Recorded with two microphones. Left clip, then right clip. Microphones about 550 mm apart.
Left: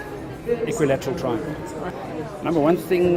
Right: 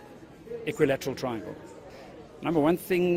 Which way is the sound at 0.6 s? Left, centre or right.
Right.